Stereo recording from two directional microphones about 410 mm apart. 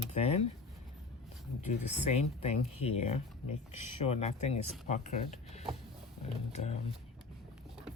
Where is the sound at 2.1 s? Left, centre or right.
Centre.